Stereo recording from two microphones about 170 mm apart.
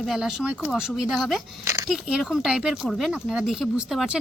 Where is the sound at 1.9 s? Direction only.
5° right (ahead or behind).